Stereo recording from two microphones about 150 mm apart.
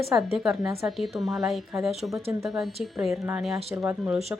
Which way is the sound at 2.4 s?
Centre (ahead or behind).